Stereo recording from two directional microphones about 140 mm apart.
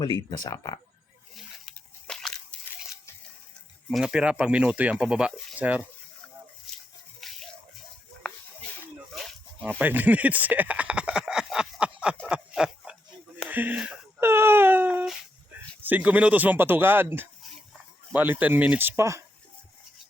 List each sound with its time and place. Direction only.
0.3 s speech: 25° left (ahead or behind)
1.4 s a sound: 5° left (ahead or behind)
3.8 s speech: 5° right (ahead or behind)
7.2 s music: centre (ahead or behind)
8.2 s a sound: 5° left (ahead or behind)
9.6 s speech: 15° right (ahead or behind)
12.3 s a sound: 5° right (ahead or behind)
13.5 s speech: 10° right (ahead or behind)
14.2 s wail: 15° right (ahead or behind)
15.8 s speech: 10° right (ahead or behind)